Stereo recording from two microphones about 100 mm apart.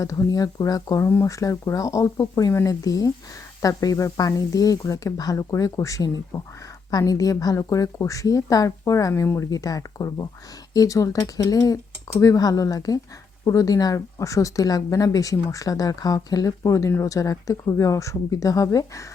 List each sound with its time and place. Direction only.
0.0 s speech: 35° left (ahead or behind)